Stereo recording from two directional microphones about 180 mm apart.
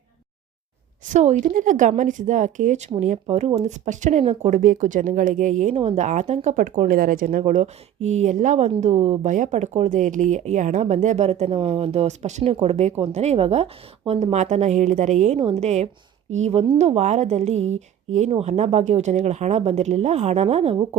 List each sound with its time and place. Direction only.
1.0 s a woman's voice: 40° right (ahead or behind)